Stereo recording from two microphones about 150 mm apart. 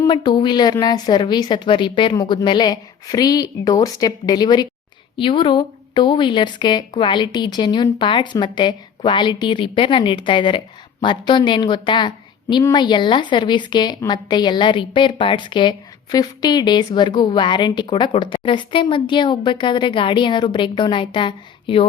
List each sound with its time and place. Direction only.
0.1 s a woman's voice: 30° left (ahead or behind)